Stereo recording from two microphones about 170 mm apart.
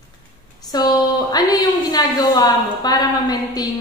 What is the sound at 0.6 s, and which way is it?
A woman's voice, 25° left (ahead or behind).